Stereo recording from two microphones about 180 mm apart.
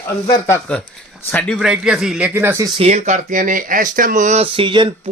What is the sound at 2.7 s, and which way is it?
Speech, 35° right (ahead or behind).